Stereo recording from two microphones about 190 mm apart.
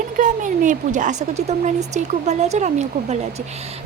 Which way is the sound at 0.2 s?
40° right (ahead or behind).